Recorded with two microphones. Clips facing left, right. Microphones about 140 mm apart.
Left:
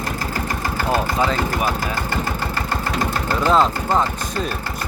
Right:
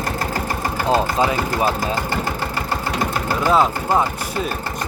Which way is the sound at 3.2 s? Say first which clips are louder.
Even; 10° right (ahead or behind).